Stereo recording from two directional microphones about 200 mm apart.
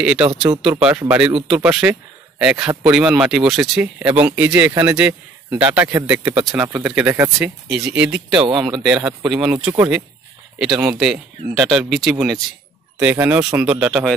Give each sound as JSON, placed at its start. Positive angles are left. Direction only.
{"t": 0.0, "sound": "a man's voice", "side_deg": -5}
{"t": 8.3, "sound": "speech", "side_deg": -25}
{"t": 8.8, "sound": "a man's voice", "side_deg": -5}